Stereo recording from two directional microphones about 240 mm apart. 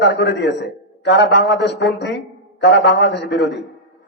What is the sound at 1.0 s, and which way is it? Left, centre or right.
A man's voice, left.